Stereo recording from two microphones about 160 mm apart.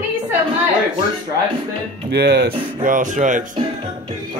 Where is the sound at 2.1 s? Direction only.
90° right.